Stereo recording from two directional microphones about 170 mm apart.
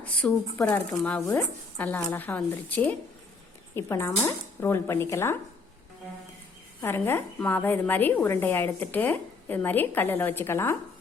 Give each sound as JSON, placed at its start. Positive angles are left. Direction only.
{"t": 0.0, "sound": "a woman's voice", "side_deg": 5}
{"t": 6.8, "sound": "a woman's voice", "side_deg": 15}